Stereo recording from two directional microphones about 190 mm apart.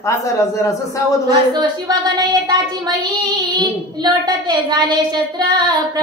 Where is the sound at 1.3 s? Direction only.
20° right (ahead or behind).